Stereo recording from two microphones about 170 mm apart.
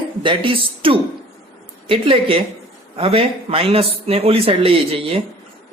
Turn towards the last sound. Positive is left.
turn(degrees=-35)  # may be behind; listen again after turning